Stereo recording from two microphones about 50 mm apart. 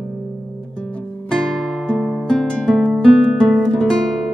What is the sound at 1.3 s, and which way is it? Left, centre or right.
Guitar, centre.